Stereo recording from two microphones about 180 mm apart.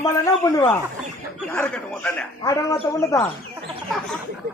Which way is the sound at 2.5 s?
20° left (ahead or behind).